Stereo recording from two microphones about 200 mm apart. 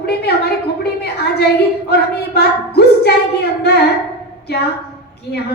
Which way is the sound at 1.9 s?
55° left (ahead or behind).